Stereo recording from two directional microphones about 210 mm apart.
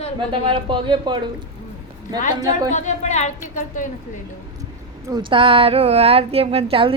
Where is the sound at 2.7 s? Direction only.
35° left (ahead or behind).